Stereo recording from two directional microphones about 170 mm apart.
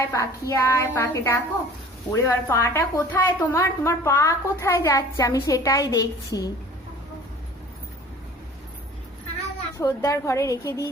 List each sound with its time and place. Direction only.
0.0 s a woman's voice: 20° left (ahead or behind)
9.7 s a woman's voice: 20° left (ahead or behind)